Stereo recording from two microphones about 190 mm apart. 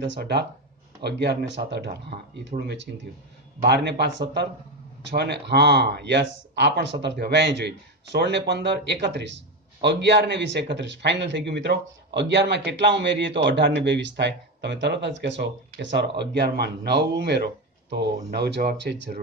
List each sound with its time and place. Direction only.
0.0 s speech: 65° right (ahead or behind)